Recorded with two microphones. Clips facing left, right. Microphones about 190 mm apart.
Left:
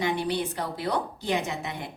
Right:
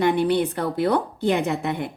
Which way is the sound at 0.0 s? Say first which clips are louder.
Right 8 dB; 60° right (ahead or behind).